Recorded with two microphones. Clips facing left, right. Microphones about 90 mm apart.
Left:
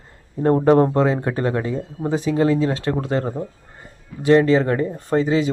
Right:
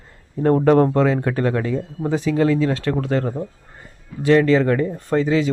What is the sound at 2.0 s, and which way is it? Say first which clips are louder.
Speech: even; 5° left (ahead or behind).